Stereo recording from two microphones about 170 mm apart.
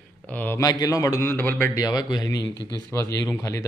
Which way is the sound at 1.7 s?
20° left (ahead or behind).